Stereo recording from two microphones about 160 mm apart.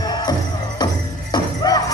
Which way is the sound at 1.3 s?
25° left (ahead or behind).